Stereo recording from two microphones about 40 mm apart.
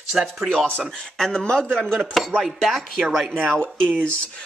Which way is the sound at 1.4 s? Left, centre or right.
Left.